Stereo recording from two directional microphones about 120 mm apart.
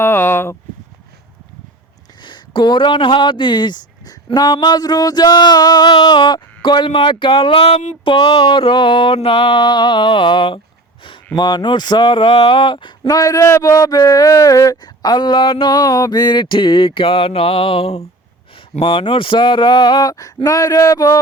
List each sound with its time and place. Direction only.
0.0 s speech: 20° left (ahead or behind)
2.2 s speech: 40° left (ahead or behind)
8.0 s mantra: 40° left (ahead or behind)
13.1 s speech: 30° left (ahead or behind)